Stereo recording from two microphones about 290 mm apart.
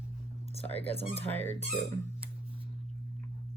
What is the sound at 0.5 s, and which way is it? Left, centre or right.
Speech, left.